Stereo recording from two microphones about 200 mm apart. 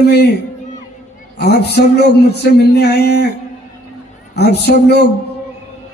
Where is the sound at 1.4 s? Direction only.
55° left (ahead or behind).